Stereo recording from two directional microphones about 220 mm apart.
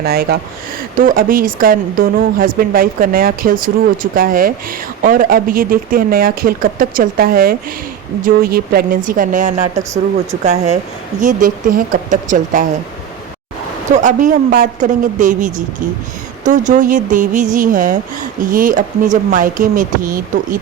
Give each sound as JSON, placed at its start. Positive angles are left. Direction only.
{"t": 0.0, "sound": "a woman's voice", "side_deg": -45}
{"t": 13.9, "sound": "a woman's voice", "side_deg": -35}